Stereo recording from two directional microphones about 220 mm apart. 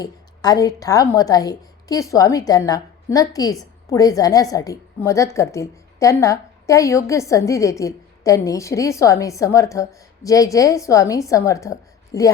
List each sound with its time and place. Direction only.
0.0 s a woman's voice: 15° left (ahead or behind)